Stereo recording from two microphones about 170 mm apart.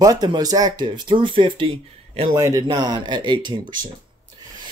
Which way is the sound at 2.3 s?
20° right (ahead or behind).